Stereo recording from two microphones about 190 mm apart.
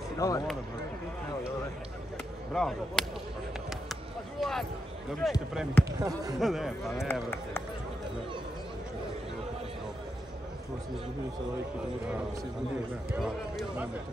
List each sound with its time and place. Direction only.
0.2 s speech: 15° left (ahead or behind)
2.5 s speech: centre (ahead or behind)
3.9 s a sound: centre (ahead or behind)
5.2 s speech: centre (ahead or behind)
5.9 s speech: 20° right (ahead or behind)
6.4 s speech: centre (ahead or behind)
7.1 s speech: 10° left (ahead or behind)
13.1 s speech: 5° right (ahead or behind)